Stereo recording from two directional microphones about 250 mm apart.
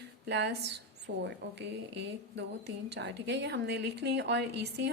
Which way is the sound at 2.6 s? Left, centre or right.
Right.